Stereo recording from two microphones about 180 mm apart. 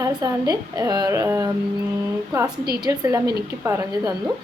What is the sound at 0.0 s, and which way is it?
A woman's voice, 20° right (ahead or behind).